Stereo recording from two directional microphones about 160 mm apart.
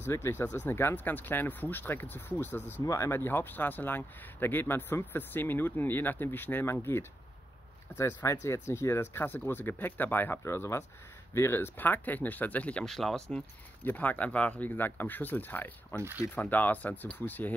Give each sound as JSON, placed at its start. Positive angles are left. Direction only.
{"t": 0.0, "sound": "speech", "side_deg": 15}